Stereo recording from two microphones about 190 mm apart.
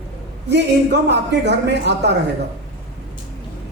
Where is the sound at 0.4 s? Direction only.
65° right (ahead or behind).